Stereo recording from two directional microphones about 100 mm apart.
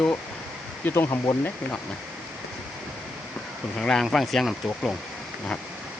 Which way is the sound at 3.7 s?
5° left (ahead or behind).